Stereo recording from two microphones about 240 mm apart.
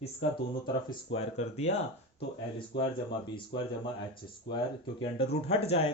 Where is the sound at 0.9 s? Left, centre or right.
Left.